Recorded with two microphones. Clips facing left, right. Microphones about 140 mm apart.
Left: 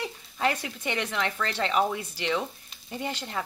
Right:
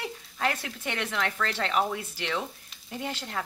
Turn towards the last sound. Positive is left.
turn(degrees=5)  # may be behind; listen again after turning